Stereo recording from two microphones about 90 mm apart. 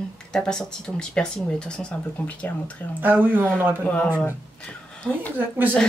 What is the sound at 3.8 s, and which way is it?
Speech, 15° left (ahead or behind).